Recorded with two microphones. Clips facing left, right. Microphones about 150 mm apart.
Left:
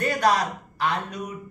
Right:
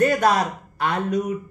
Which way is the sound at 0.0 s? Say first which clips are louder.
Right 4 dB; 50° right (ahead or behind).